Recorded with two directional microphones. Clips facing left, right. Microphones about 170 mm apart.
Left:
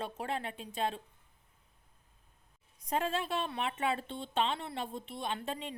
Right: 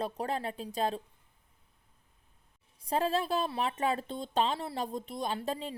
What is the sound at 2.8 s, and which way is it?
A woman's voice, 35° right (ahead or behind).